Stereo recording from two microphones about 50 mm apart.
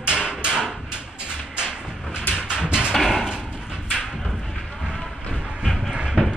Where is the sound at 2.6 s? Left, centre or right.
Centre.